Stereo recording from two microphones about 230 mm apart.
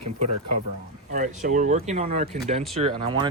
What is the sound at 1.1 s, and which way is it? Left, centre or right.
Speech, right.